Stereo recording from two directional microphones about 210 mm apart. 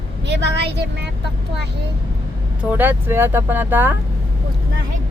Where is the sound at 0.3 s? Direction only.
55° right (ahead or behind).